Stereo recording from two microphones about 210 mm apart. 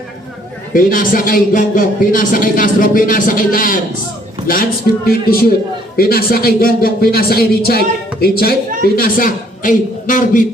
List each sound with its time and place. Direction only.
0.7 s a man's voice: 40° left (ahead or behind)
5.0 s a man's voice: 45° left (ahead or behind)